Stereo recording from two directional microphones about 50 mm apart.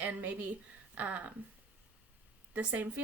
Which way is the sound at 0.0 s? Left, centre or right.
Right.